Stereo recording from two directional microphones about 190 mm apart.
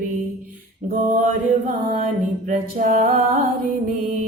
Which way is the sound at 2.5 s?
45° right (ahead or behind).